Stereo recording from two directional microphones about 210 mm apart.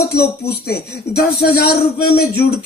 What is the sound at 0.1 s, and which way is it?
Speech, 50° left (ahead or behind).